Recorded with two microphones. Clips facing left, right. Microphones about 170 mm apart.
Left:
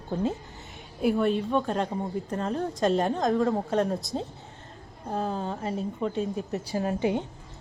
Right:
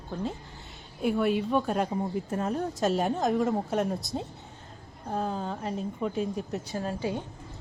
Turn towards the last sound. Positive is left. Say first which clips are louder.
# left 5 dB
turn(degrees=20)  # may be behind; listen again after turning